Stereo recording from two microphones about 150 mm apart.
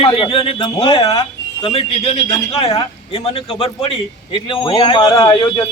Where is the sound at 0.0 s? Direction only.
35° left (ahead or behind).